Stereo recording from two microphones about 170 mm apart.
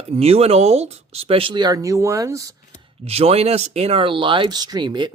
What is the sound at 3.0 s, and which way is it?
Speech, 35° right (ahead or behind).